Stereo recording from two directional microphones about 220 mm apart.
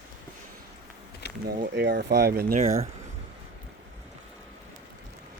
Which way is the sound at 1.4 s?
45° right (ahead or behind).